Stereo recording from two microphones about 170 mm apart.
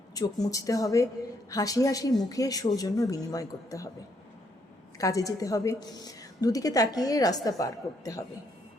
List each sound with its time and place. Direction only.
0.1 s a woman's voice: 20° left (ahead or behind)
4.9 s a woman's voice: 20° left (ahead or behind)